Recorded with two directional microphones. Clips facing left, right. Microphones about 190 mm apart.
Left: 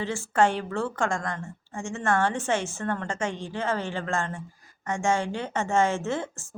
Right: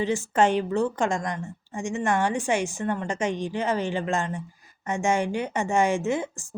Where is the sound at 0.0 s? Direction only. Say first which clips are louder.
Right 2 dB; 20° right (ahead or behind).